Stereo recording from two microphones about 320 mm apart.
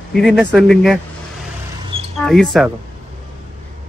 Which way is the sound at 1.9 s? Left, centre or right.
Centre.